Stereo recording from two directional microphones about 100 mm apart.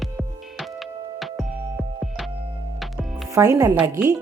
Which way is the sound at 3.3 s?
35° right (ahead or behind).